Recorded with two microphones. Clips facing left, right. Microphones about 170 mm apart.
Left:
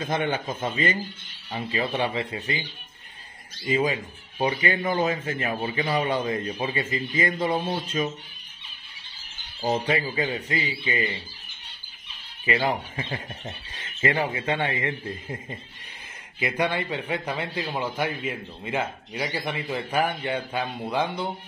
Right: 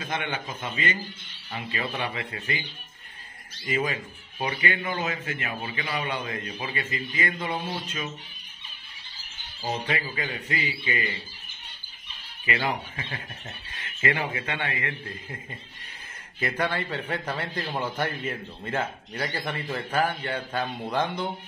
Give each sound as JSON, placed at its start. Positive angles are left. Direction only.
{"t": 0.0, "sound": "a man's voice", "side_deg": 35}
{"t": 2.1, "sound": "speech", "side_deg": 20}
{"t": 3.6, "sound": "a man's voice", "side_deg": 20}
{"t": 4.5, "sound": "a man's voice", "side_deg": 35}
{"t": 9.8, "sound": "speech", "side_deg": 25}
{"t": 12.9, "sound": "speech", "side_deg": 25}
{"t": 16.3, "sound": "a man's voice", "side_deg": 15}